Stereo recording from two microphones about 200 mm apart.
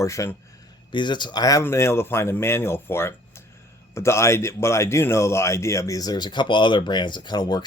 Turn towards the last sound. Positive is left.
turn(degrees=20)  # may be behind; listen again after turning